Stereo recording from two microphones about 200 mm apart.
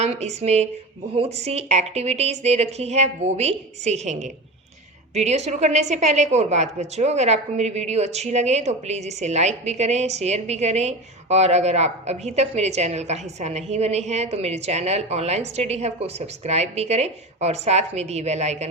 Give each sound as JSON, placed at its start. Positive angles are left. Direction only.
{"t": 0.0, "sound": "a woman's voice", "side_deg": -35}